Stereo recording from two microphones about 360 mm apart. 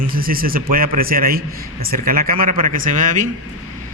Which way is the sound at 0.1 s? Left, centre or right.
Right.